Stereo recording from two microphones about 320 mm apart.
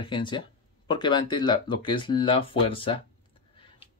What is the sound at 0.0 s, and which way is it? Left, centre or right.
Speech, centre.